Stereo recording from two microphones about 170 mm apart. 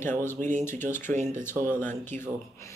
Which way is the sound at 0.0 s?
15° left (ahead or behind).